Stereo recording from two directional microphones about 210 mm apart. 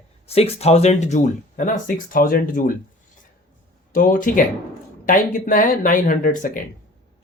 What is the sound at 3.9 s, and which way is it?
Speech, 40° left (ahead or behind).